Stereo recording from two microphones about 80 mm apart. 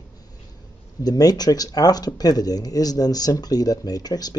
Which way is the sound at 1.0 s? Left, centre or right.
Left.